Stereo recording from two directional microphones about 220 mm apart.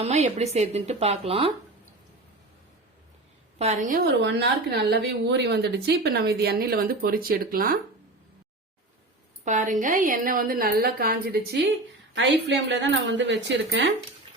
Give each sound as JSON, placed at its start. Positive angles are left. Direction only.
{"t": 0.0, "sound": "speech", "side_deg": -30}
{"t": 3.6, "sound": "a woman's voice", "side_deg": -35}
{"t": 9.4, "sound": "a woman's voice", "side_deg": -35}